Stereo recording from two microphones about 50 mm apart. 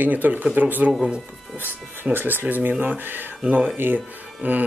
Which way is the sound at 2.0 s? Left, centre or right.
Right.